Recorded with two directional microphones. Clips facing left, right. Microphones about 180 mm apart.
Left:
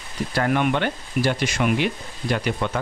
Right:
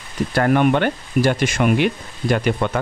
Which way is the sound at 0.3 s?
50° right (ahead or behind).